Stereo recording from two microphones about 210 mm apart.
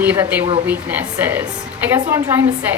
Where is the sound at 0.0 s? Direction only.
10° right (ahead or behind).